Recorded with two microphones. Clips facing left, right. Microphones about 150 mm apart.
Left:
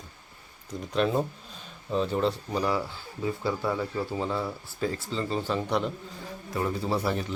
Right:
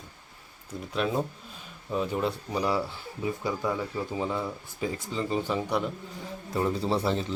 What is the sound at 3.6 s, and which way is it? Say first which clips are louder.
Speech: left 1 dB; 5° left (ahead or behind).